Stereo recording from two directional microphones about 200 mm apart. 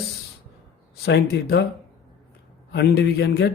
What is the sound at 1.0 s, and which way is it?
Speech, 55° left (ahead or behind).